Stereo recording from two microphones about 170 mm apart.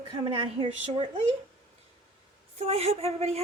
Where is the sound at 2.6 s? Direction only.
35° right (ahead or behind).